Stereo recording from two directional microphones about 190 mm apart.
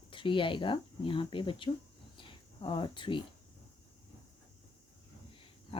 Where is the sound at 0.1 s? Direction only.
25° left (ahead or behind).